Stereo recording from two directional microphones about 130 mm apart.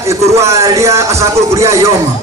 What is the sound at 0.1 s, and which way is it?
A man's voice, 20° right (ahead or behind).